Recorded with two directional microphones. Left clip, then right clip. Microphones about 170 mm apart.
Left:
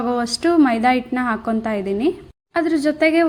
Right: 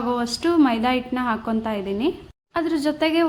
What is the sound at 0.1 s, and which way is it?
A woman's voice, 20° left (ahead or behind).